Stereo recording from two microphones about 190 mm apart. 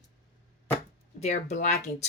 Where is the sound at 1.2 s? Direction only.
35° left (ahead or behind).